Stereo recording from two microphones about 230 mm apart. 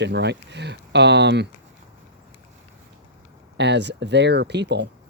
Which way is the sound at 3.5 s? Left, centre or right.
Right.